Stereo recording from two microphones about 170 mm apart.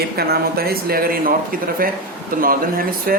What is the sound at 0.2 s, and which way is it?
Speech, 65° right (ahead or behind).